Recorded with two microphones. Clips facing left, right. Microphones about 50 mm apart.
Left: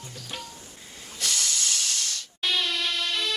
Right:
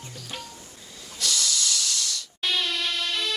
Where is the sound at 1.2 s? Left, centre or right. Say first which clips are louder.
Right 2 dB; left.